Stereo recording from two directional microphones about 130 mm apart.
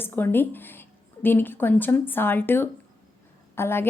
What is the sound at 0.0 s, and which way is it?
A woman's voice, 15° left (ahead or behind).